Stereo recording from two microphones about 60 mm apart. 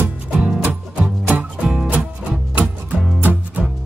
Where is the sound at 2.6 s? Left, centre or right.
Right.